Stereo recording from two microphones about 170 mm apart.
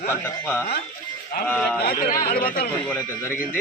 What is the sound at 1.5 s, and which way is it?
Speech, 5° left (ahead or behind).